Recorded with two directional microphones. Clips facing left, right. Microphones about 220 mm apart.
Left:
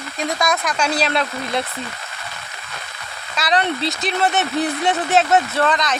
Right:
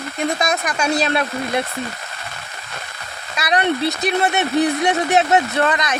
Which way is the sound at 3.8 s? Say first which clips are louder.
Right 3 dB; 60° right (ahead or behind).